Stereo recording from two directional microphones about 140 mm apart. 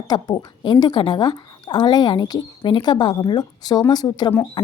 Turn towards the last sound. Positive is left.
turn(degrees=30)  # may be behind; listen again after turning